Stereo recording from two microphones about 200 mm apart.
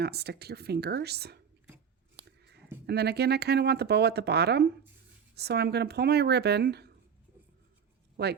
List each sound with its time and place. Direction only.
0.0 s speech: 55° right (ahead or behind)
2.1 s a sound: 55° right (ahead or behind)
2.8 s speech: 55° right (ahead or behind)
8.1 s speech: 55° right (ahead or behind)